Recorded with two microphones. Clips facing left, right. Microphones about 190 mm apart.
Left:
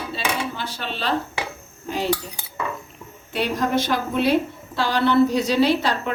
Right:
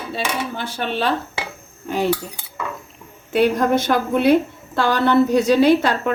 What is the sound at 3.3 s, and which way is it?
A woman's voice, 50° right (ahead or behind).